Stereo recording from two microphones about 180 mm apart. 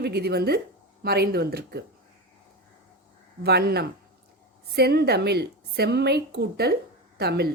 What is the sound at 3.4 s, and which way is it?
A woman's voice, 65° right (ahead or behind).